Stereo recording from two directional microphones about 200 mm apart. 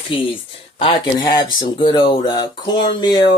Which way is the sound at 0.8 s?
25° left (ahead or behind).